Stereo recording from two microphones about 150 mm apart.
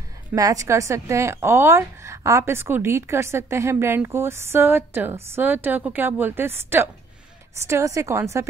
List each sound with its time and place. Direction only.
0.3 s a woman's voice: 20° right (ahead or behind)